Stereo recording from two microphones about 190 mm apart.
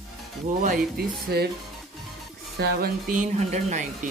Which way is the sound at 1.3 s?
60° right (ahead or behind).